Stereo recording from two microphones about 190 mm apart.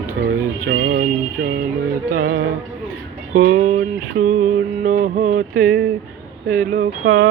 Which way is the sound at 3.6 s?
40° right (ahead or behind).